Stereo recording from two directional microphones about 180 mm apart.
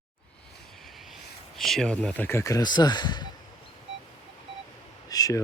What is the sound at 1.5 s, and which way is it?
Speech, centre (ahead or behind).